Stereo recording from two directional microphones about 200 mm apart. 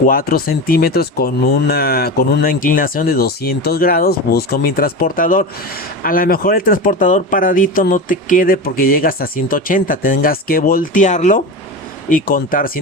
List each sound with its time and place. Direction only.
0.0 s speech: 45° left (ahead or behind)